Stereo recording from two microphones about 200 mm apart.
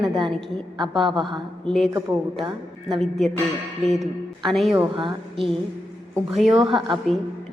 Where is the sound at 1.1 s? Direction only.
25° right (ahead or behind).